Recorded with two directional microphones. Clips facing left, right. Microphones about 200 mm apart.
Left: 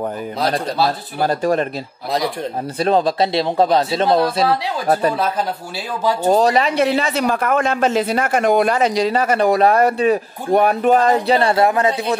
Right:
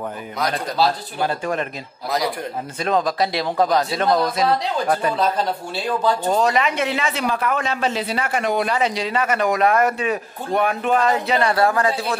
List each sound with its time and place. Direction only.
1.2 s speech: 40° left (ahead or behind)
2.8 s speech: 30° left (ahead or behind)
6.2 s speech: 35° left (ahead or behind); by 12.2 s 20° left (ahead or behind)